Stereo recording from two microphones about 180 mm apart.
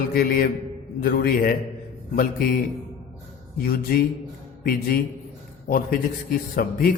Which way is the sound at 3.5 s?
55° left (ahead or behind).